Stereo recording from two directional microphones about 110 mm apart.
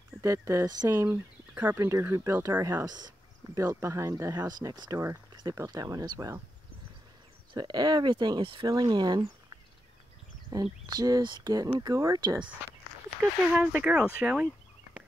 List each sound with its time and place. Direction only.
0.2 s speech: 30° right (ahead or behind)
0.9 s speech: 20° right (ahead or behind)
2.8 s speech: 40° right (ahead or behind)
3.5 s speech: 25° right (ahead or behind)
7.5 s speech: 40° right (ahead or behind)
8.6 s speech: 40° right (ahead or behind)
10.5 s speech: 35° right (ahead or behind)
13.2 s speech: 5° right (ahead or behind)